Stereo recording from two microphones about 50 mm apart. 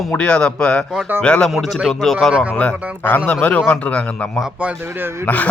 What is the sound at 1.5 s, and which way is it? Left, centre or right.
Speech, centre.